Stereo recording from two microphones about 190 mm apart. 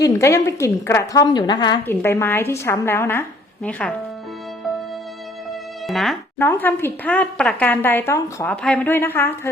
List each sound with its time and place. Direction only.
0.0 s speech: 15° left (ahead or behind)
5.9 s speech: centre (ahead or behind)